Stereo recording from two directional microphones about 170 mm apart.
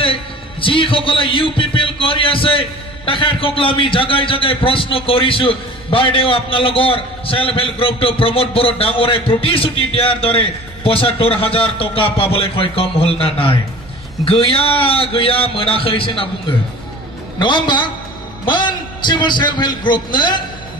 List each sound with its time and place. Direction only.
0.0 s a man's voice: 30° left (ahead or behind)